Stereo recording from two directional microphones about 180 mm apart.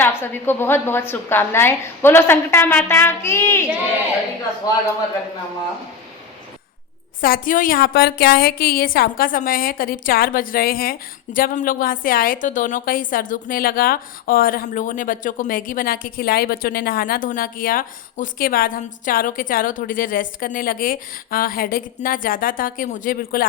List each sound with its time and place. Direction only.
0.0 s a woman's voice: 10° left (ahead or behind)
7.2 s a woman's voice: 50° left (ahead or behind)